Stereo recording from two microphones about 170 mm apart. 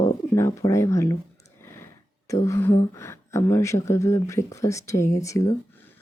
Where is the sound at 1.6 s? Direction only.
15° left (ahead or behind).